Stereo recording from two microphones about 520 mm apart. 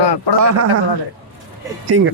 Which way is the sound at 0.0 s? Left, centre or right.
Left.